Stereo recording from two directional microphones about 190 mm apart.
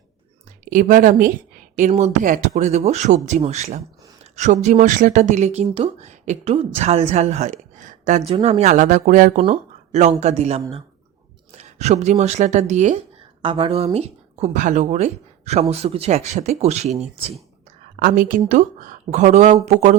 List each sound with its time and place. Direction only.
0.7 s a woman's voice: 45° right (ahead or behind)
13.4 s speech: 30° right (ahead or behind)
18.0 s speech: 45° right (ahead or behind)